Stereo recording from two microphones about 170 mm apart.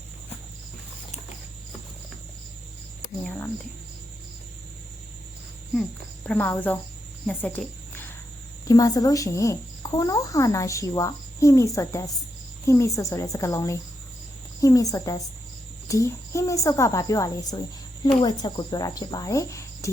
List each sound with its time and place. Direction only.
3.2 s speech: 15° left (ahead or behind)
6.2 s a woman's voice: 10° left (ahead or behind)